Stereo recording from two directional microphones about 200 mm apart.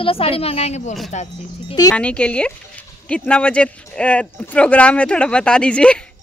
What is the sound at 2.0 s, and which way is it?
Speech, 5° left (ahead or behind).